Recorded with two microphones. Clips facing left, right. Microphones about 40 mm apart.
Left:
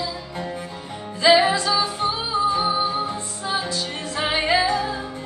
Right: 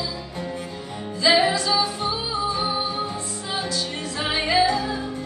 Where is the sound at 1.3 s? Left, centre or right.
Left.